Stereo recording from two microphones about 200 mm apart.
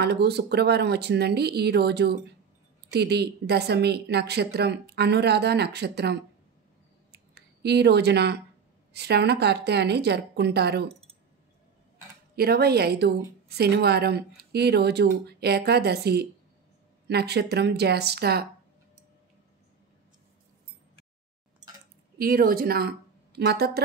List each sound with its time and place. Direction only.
0.0 s a woman's voice: 55° right (ahead or behind)
7.1 s clicking: 55° right (ahead or behind)
8.9 s a woman's voice: 55° right (ahead or behind)
12.4 s a woman's voice: 50° right (ahead or behind)
22.2 s speech: 45° right (ahead or behind)